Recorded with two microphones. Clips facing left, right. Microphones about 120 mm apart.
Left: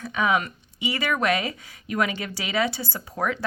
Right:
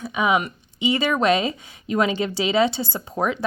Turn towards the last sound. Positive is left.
turn(degrees=-20)  # may be behind; listen again after turning